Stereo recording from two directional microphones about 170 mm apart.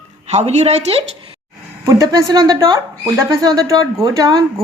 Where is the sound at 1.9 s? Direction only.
20° right (ahead or behind).